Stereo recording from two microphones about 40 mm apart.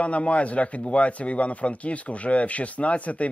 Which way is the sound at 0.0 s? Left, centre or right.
Left.